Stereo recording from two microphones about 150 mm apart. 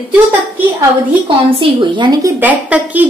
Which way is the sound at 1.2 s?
35° right (ahead or behind).